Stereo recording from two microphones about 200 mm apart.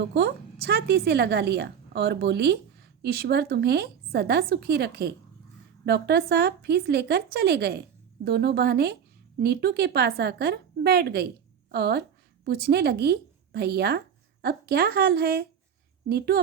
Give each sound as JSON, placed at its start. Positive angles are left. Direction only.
{"t": 0.1, "sound": "a woman's voice", "side_deg": -55}